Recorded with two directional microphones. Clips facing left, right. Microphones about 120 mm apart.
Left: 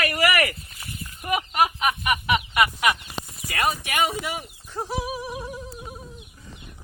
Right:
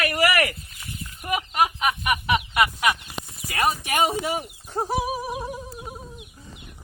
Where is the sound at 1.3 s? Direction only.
10° left (ahead or behind).